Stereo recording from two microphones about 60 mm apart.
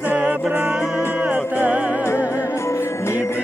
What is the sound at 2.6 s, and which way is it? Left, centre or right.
Music, left.